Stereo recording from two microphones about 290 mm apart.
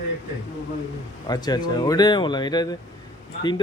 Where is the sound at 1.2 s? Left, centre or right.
Centre.